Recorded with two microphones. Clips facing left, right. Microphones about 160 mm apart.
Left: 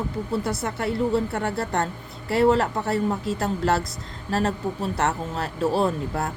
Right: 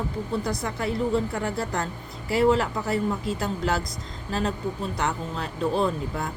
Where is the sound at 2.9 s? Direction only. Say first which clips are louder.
Left 2 dB; centre (ahead or behind).